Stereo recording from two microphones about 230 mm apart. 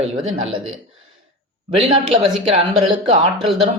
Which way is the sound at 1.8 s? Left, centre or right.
Right.